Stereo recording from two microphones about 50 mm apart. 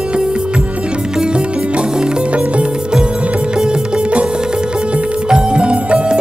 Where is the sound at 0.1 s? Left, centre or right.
Centre.